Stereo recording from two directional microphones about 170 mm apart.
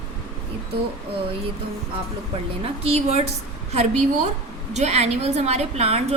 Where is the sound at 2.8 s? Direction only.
35° right (ahead or behind).